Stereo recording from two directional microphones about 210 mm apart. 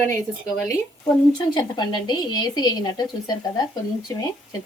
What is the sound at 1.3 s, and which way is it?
Speech, 20° left (ahead or behind).